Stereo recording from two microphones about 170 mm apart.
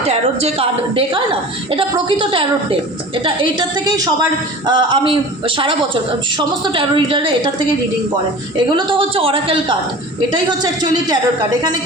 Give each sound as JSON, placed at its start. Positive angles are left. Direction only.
{"t": 0.1, "sound": "a woman's voice", "side_deg": -35}
{"t": 8.7, "sound": "a woman's voice", "side_deg": -30}